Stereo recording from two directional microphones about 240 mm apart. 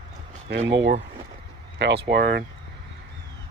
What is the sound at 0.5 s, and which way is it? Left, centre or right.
Speech, right.